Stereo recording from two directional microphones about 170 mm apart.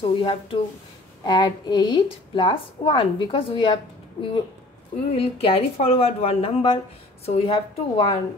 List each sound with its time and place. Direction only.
0.2 s a woman's voice: 30° left (ahead or behind)